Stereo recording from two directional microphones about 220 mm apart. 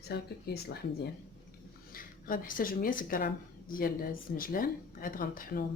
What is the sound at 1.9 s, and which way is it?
Speech, 40° left (ahead or behind).